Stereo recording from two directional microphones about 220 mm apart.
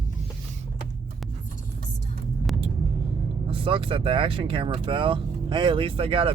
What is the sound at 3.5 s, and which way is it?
Speech, 25° right (ahead or behind).